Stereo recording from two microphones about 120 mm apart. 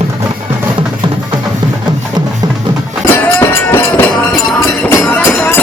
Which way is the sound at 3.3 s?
20° left (ahead or behind).